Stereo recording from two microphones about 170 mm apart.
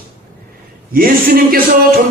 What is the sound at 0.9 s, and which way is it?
Speech, 60° right (ahead or behind).